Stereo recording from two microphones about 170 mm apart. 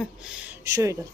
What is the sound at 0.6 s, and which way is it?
Speech, 20° right (ahead or behind).